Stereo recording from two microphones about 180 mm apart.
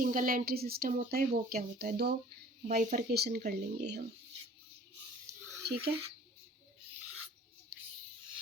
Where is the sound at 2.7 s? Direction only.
50° right (ahead or behind).